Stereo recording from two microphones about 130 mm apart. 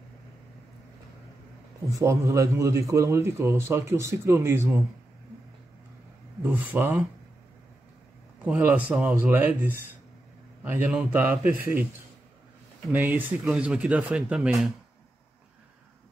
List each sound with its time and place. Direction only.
1.9 s a man's voice: 25° right (ahead or behind)
6.4 s speech: 15° right (ahead or behind)
8.5 s speech: 15° right (ahead or behind)
12.9 s speech: 15° right (ahead or behind)